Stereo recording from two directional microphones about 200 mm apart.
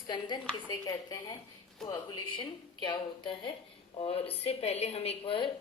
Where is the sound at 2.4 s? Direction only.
25° left (ahead or behind).